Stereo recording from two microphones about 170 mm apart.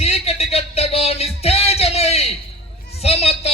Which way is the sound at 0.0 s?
35° left (ahead or behind).